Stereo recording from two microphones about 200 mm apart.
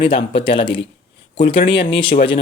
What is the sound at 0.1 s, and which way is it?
Speech, 25° left (ahead or behind).